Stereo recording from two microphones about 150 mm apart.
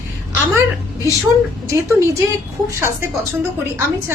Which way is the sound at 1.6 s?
20° right (ahead or behind).